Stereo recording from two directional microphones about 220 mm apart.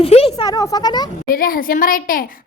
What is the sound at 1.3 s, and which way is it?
Speech, 40° left (ahead or behind).